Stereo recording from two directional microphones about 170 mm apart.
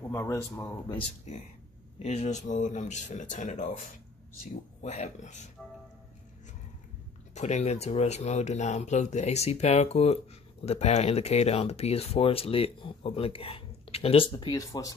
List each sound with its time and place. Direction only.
0.1 s speech: 15° left (ahead or behind)
0.9 s speech: 45° left (ahead or behind)
4.8 s speech: 40° left (ahead or behind)
7.3 s speech: 40° left (ahead or behind); by 15.0 s 20° left (ahead or behind)